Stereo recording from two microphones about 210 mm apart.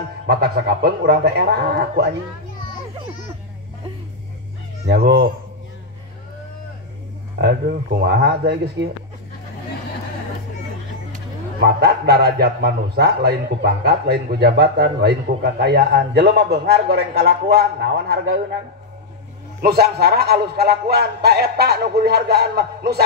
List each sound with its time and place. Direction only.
0.3 s a man's voice: 50° right (ahead or behind)
4.8 s a man's voice: 50° right (ahead or behind)
7.3 s a man's voice: 50° right (ahead or behind)
11.6 s a man's voice: 50° right (ahead or behind)
19.6 s a man's voice: 50° right (ahead or behind)